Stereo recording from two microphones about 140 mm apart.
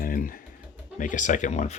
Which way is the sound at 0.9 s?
65° left (ahead or behind).